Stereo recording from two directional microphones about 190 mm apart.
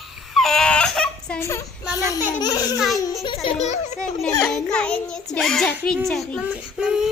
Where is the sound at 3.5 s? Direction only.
35° left (ahead or behind).